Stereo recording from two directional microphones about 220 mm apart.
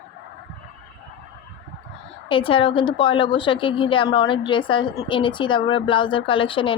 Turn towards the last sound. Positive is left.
turn(degrees=25)  # may be behind; listen again after turning